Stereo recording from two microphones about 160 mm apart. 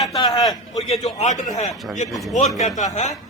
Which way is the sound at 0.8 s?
40° left (ahead or behind).